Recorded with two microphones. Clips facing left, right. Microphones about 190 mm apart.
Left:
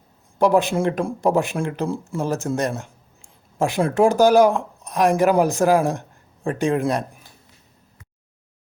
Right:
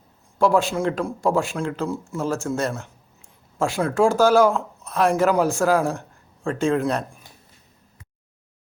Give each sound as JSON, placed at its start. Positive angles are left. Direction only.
{"t": 0.3, "sound": "a man's voice", "side_deg": 20}